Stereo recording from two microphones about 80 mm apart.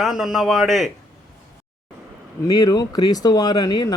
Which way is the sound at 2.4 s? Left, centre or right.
Left.